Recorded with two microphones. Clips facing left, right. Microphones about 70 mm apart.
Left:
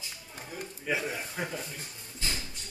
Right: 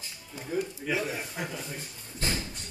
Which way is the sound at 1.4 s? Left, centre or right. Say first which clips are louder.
Left 3 dB; left.